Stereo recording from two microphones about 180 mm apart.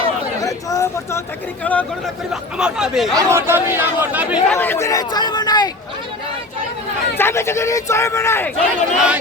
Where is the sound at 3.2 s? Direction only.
15° right (ahead or behind).